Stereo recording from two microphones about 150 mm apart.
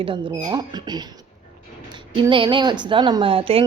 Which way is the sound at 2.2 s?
35° right (ahead or behind).